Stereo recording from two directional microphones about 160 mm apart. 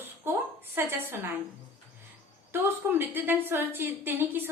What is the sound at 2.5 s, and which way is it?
A woman's voice, 15° right (ahead or behind).